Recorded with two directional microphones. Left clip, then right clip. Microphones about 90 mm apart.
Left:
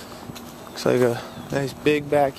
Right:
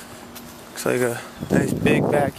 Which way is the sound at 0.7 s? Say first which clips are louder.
Left 2 dB; 5° left (ahead or behind).